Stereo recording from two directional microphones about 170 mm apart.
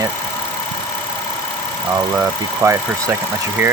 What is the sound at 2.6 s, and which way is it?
Speech, 15° right (ahead or behind).